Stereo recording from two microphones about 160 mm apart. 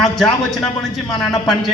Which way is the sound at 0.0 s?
5° left (ahead or behind).